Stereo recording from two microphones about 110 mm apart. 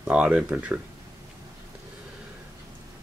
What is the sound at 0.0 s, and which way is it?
Speech, 10° right (ahead or behind).